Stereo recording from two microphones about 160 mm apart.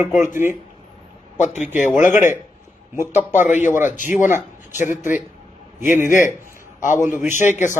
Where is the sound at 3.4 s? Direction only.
50° left (ahead or behind).